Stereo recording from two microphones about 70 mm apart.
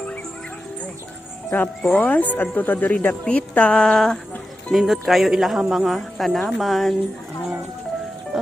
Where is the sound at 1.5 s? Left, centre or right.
Left.